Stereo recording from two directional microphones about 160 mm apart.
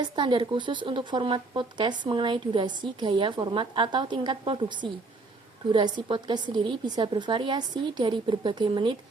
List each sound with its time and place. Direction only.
0.0 s a woman's voice: 30° right (ahead or behind)